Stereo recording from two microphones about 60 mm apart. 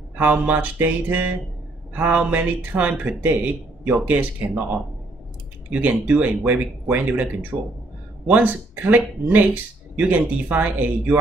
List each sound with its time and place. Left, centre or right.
0.1 s speech: right
5.7 s speech: right
8.3 s speech: right